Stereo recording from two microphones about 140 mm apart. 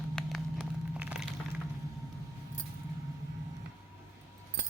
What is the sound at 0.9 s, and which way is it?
Crack, 5° right (ahead or behind).